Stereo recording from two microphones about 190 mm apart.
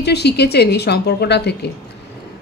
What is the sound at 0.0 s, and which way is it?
Speech, 60° left (ahead or behind).